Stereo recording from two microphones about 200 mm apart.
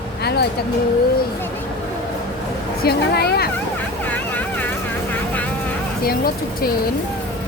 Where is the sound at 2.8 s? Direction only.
55° left (ahead or behind).